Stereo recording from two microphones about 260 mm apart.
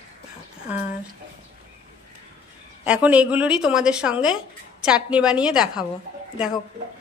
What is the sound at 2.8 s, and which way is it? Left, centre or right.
Speech, centre.